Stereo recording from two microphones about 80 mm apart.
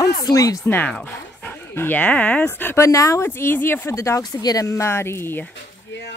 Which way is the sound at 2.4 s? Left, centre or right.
Left.